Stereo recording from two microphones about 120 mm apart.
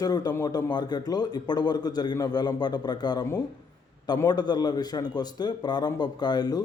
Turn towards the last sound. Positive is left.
turn(degrees=35)  # may be behind; listen again after turning